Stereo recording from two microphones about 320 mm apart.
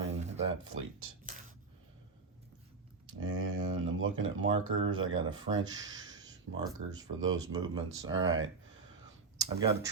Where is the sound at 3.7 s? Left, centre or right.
Right.